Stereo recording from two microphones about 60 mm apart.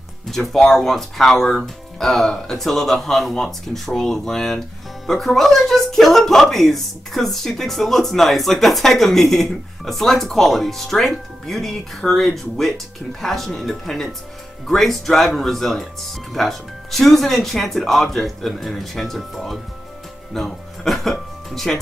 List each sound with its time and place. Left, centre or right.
0.3 s speech: centre